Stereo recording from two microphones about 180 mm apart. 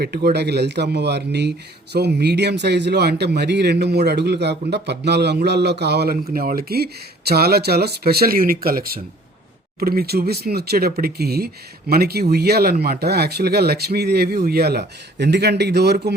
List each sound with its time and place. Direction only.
0.0 s speech: 60° right (ahead or behind)
6.3 s speech: 55° right (ahead or behind)